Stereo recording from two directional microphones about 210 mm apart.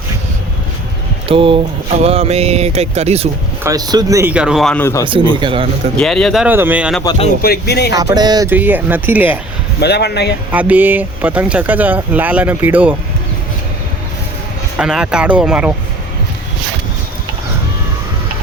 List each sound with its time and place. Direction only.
1.3 s speech: 25° right (ahead or behind)
3.6 s speech: 15° right (ahead or behind); by 5.0 s 10° left (ahead or behind)
5.4 s speech: 25° right (ahead or behind)
6.0 s speech: centre (ahead or behind)
7.0 s speech: 20° left (ahead or behind)
7.4 s speech: 50° left (ahead or behind)
7.9 s speech: 20° right (ahead or behind)
9.8 s speech: 50° left (ahead or behind)
10.5 s speech: 5° right (ahead or behind)
14.8 s speech: 5° right (ahead or behind)